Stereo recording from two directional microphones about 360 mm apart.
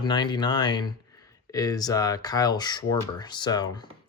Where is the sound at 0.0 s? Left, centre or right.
Centre.